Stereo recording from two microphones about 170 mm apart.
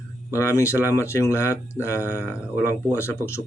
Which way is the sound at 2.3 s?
5° right (ahead or behind).